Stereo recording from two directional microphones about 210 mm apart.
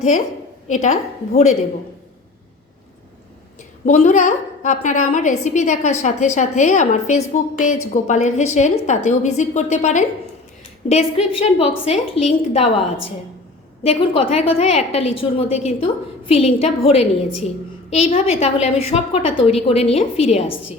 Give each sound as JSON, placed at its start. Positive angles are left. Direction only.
{"t": 0.7, "sound": "a woman's voice", "side_deg": 35}
{"t": 3.8, "sound": "a woman's voice", "side_deg": 35}
{"t": 13.8, "sound": "a woman's voice", "side_deg": 30}